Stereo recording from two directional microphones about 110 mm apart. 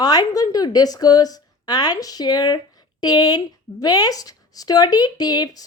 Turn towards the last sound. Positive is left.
turn(degrees=35)  # may be behind; listen again after turning